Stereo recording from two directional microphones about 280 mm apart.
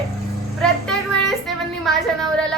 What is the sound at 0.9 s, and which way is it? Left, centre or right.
A woman's voice, centre.